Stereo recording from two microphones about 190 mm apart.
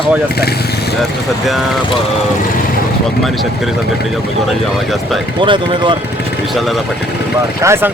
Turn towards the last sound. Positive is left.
turn(degrees=-15)  # may be behind; listen again after turning